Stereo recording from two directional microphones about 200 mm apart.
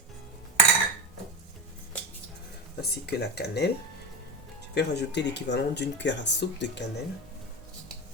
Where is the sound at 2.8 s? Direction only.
55° left (ahead or behind).